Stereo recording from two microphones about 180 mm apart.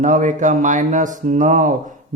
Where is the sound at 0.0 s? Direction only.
45° right (ahead or behind).